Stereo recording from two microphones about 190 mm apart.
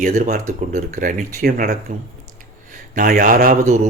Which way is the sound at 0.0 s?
45° right (ahead or behind).